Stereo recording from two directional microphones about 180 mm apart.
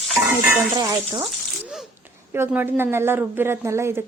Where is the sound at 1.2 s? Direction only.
Centre (ahead or behind).